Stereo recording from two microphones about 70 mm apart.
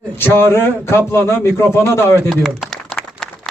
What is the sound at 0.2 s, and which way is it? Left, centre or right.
A man's voice, left.